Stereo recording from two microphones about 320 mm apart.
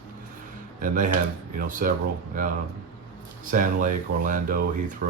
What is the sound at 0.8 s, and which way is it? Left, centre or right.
Speech, right.